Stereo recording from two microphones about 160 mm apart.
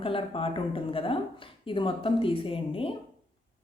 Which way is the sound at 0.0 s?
35° left (ahead or behind).